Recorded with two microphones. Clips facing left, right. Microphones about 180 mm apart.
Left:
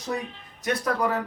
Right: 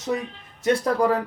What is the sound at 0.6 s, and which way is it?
Speech, 30° right (ahead or behind).